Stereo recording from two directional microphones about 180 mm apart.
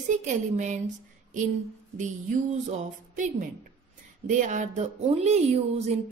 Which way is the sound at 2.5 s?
45° right (ahead or behind).